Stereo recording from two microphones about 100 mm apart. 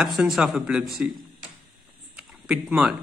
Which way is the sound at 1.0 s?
15° right (ahead or behind).